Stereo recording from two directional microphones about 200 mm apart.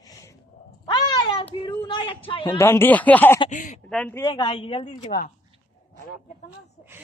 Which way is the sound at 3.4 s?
40° left (ahead or behind).